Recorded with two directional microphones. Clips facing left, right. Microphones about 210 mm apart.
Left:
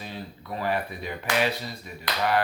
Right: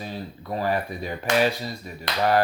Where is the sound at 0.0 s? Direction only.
40° right (ahead or behind).